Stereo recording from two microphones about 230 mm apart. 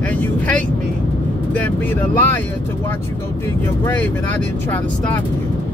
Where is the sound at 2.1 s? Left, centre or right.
Centre.